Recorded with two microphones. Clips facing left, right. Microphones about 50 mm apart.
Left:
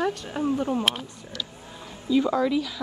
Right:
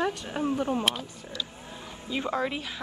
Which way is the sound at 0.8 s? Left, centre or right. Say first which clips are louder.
Left 2 dB; left.